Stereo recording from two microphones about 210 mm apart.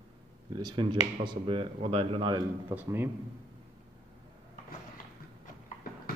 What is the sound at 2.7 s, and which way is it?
Speech, 10° right (ahead or behind).